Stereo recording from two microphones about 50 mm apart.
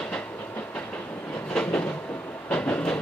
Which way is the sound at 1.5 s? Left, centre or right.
Left.